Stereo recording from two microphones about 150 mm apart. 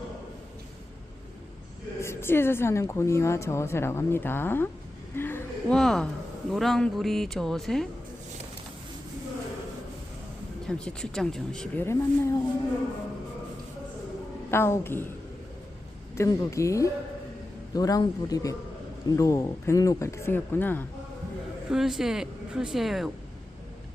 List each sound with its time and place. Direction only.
2.0 s a woman's voice: 15° left (ahead or behind)
5.1 s a sound: 15° left (ahead or behind)
5.7 s a woman's voice: 5° left (ahead or behind)
10.7 s a woman's voice: 5° left (ahead or behind)
11.8 s a woman's voice: 20° left (ahead or behind)
14.5 s a woman's voice: 15° left (ahead or behind)
16.1 s speech: 20° left (ahead or behind)
21.7 s a woman's voice: 5° right (ahead or behind)